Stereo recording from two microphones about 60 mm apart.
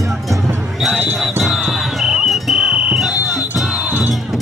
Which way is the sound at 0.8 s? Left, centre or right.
Centre.